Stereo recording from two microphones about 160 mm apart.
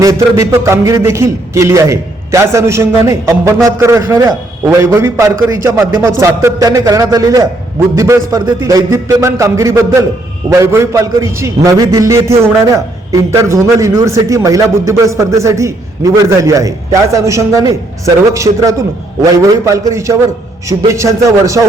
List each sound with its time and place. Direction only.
0.0 s a man's voice: 20° right (ahead or behind)